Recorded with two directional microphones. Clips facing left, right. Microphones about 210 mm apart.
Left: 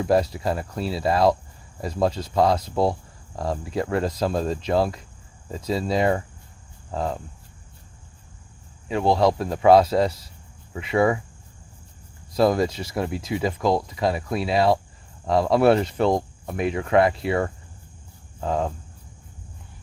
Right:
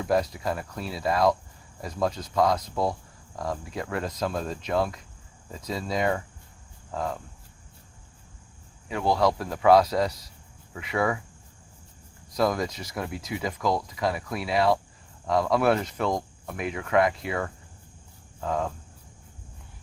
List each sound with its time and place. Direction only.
0.0 s speech: 30° left (ahead or behind)
8.9 s speech: 25° left (ahead or behind)
12.3 s speech: 30° left (ahead or behind)
18.3 s cricket: 30° left (ahead or behind)